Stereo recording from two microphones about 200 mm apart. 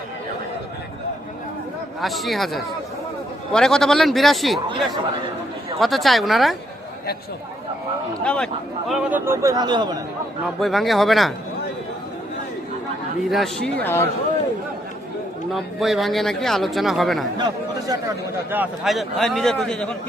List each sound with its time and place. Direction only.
2.0 s speech: centre (ahead or behind)
5.8 s speech: centre (ahead or behind)
8.2 s speech: 5° left (ahead or behind)
8.9 s a man's voice: 10° right (ahead or behind)
10.4 s speech: centre (ahead or behind)
13.2 s speech: centre (ahead or behind)
13.8 s speech: 10° left (ahead or behind)
15.5 s speech: centre (ahead or behind)
17.3 s speech: 20° right (ahead or behind)
18.5 s speech: 5° right (ahead or behind)